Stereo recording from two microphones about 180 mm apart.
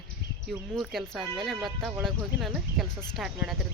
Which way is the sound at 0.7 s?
Centre (ahead or behind).